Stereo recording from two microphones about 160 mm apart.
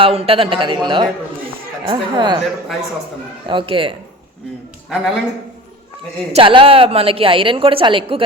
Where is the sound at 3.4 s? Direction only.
30° right (ahead or behind).